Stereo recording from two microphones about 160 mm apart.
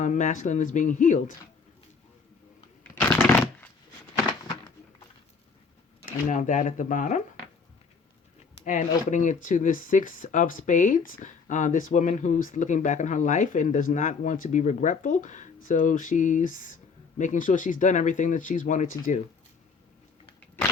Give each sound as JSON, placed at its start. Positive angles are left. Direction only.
{"t": 0.0, "sound": "speech", "side_deg": 50}
{"t": 2.9, "sound": "shuffling cards", "side_deg": 15}
{"t": 6.1, "sound": "speech", "side_deg": 55}
{"t": 8.6, "sound": "speech", "side_deg": 50}